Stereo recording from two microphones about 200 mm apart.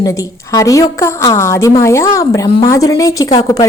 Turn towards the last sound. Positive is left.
turn(degrees=20)  # may be behind; listen again after turning